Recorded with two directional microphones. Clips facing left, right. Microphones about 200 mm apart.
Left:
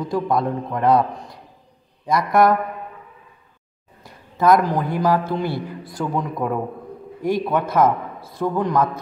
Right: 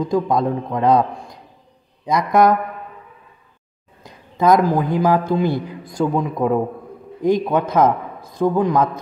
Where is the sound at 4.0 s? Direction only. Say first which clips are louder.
Right 2 dB; 20° right (ahead or behind).